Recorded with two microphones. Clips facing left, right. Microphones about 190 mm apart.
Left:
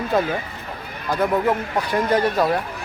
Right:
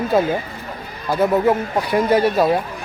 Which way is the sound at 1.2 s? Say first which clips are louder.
Right 4 dB; 20° right (ahead or behind).